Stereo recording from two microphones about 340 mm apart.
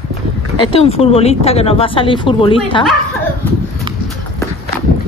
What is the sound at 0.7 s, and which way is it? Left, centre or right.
Speech, centre.